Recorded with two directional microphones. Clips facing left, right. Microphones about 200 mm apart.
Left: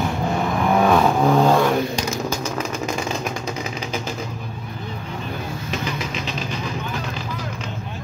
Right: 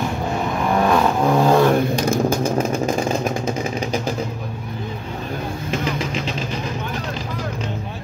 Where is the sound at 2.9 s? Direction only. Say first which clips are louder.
Right 5 dB; 35° right (ahead or behind).